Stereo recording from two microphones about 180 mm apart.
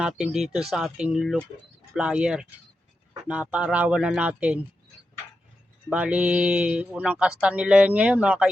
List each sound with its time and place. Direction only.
0.0 s speech: 5° right (ahead or behind)
5.9 s speech: 5° right (ahead or behind)